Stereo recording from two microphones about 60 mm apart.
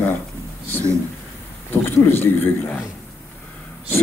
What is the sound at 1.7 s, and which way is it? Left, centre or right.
Speech, left.